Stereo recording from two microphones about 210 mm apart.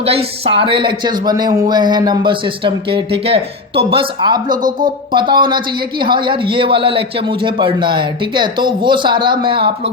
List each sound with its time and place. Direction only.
0.0 s speech: 30° right (ahead or behind)